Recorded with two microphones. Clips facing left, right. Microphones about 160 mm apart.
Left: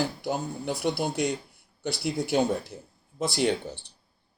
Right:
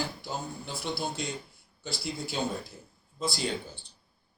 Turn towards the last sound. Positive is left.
turn(degrees=70)  # may be behind; listen again after turning